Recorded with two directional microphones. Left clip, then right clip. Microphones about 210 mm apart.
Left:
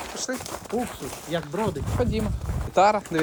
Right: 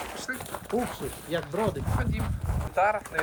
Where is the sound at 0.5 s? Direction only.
Centre (ahead or behind).